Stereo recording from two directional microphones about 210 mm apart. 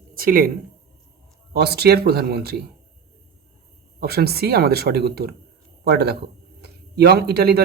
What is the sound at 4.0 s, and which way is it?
Speech, 50° right (ahead or behind).